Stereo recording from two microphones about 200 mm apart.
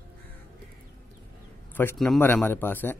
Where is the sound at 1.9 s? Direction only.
Centre (ahead or behind).